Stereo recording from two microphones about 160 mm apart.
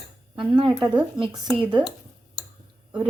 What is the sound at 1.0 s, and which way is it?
Speech, 5° right (ahead or behind).